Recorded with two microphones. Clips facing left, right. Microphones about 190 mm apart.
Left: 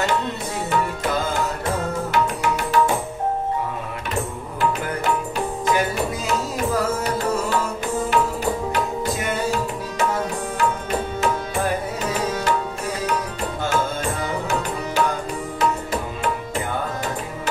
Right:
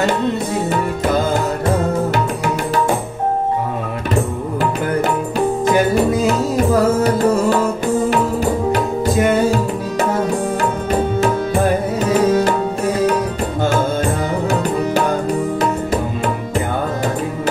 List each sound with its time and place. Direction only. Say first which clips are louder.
6.5 s music: right 8 dB; 40° right (ahead or behind)